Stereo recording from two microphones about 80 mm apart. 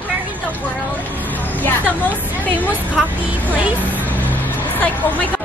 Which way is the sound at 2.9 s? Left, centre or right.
Right.